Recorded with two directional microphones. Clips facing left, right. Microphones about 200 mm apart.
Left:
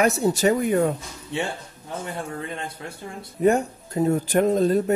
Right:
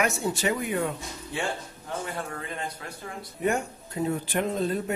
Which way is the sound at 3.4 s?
35° left (ahead or behind).